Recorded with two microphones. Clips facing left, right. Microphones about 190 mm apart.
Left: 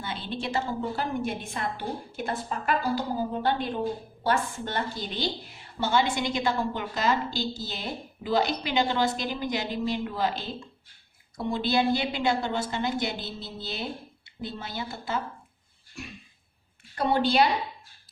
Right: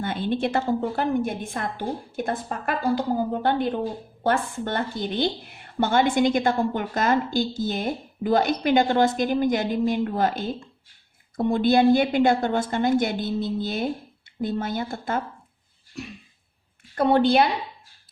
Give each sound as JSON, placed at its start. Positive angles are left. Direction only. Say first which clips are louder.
{"t": 0.0, "sound": "a woman's voice", "louder": "right 9 dB", "side_deg": -50}
{"t": 16.9, "sound": "a woman's voice", "louder": "right 6 dB", "side_deg": -50}